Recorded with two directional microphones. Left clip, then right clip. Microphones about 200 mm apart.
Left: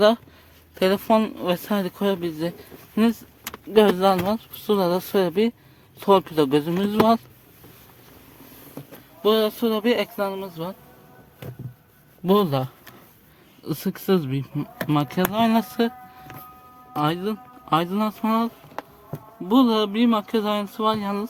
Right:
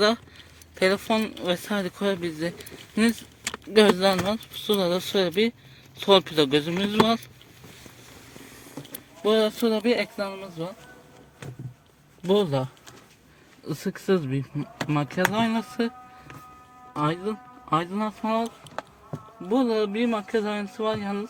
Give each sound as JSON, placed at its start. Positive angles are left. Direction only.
{"t": 0.8, "sound": "speech", "side_deg": 20}
{"t": 9.2, "sound": "speech", "side_deg": 10}
{"t": 12.2, "sound": "speech", "side_deg": 25}
{"t": 13.7, "sound": "speech", "side_deg": 10}
{"t": 16.9, "sound": "speech", "side_deg": 15}
{"t": 19.5, "sound": "speech", "side_deg": 20}